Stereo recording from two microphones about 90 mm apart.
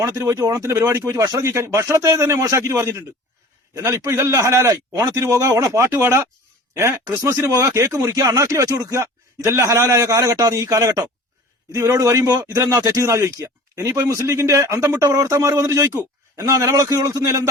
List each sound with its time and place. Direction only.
0.0 s speech: 40° right (ahead or behind)